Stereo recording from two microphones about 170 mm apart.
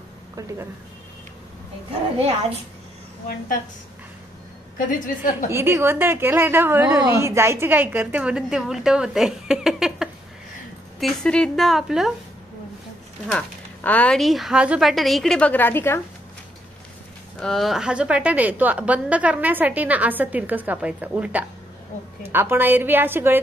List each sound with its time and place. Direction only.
4.7 s a woman's voice: 50° left (ahead or behind)
5.5 s a woman's voice: 15° right (ahead or behind)
13.8 s a woman's voice: 10° left (ahead or behind)
17.4 s a woman's voice: centre (ahead or behind)